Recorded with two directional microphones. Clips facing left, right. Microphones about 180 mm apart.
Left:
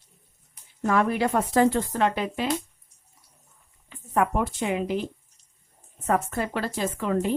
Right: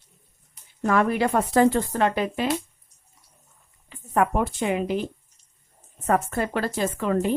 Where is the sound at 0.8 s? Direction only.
60° right (ahead or behind).